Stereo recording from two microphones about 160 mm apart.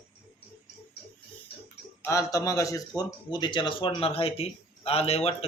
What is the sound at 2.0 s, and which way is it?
A man's voice, 20° left (ahead or behind).